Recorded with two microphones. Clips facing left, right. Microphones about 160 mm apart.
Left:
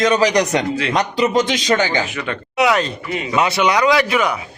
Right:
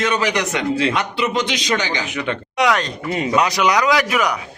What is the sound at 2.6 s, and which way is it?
A man's voice, 5° left (ahead or behind).